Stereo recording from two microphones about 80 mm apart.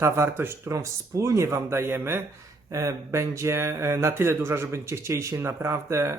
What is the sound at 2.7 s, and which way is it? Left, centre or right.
Speech, right.